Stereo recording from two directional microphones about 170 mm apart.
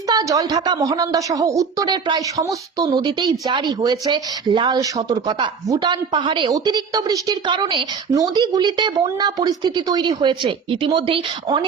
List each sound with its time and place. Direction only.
0.1 s a woman's voice: 20° right (ahead or behind)